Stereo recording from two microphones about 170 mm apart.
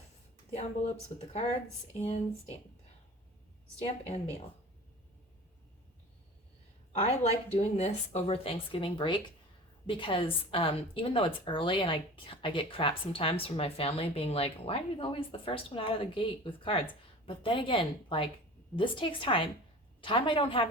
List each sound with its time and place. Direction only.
0.5 s a woman's voice: 40° left (ahead or behind)
3.8 s a woman's voice: 40° left (ahead or behind)
7.0 s a woman's voice: 40° left (ahead or behind)